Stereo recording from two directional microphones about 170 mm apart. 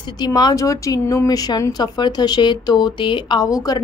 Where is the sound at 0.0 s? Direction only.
25° left (ahead or behind).